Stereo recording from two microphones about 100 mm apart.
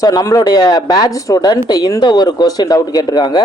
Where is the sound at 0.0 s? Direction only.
35° left (ahead or behind).